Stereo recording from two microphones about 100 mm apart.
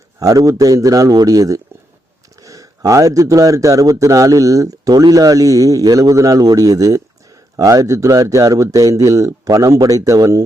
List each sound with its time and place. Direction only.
0.2 s a man's voice: 35° right (ahead or behind)